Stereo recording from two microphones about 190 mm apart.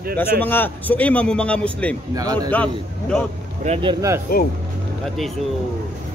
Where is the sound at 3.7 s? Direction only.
25° right (ahead or behind).